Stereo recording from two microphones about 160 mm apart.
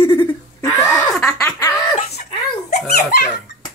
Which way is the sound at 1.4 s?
15° left (ahead or behind).